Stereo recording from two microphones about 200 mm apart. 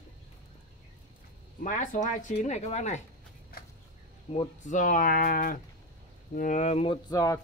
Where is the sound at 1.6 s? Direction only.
40° left (ahead or behind).